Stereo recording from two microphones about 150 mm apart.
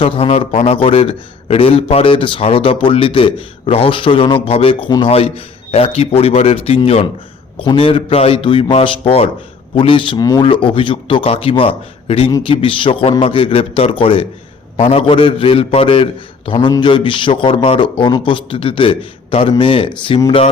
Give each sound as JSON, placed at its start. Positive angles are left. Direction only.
{"t": 0.0, "sound": "a man's voice", "side_deg": 40}
{"t": 16.5, "sound": "a man's voice", "side_deg": 30}